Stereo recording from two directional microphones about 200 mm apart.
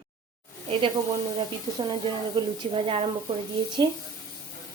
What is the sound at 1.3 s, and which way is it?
A woman's voice, 20° right (ahead or behind).